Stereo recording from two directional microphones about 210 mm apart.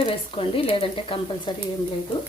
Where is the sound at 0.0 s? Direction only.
25° left (ahead or behind).